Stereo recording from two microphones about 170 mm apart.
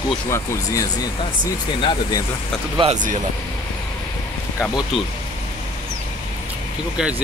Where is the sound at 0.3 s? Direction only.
20° left (ahead or behind).